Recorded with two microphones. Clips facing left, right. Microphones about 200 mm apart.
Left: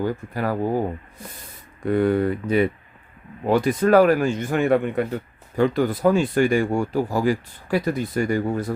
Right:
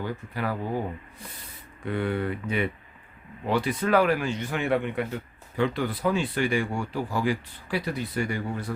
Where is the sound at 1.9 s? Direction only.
40° left (ahead or behind).